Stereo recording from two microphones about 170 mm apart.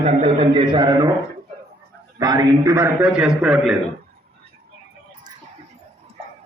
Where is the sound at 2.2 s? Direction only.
20° right (ahead or behind).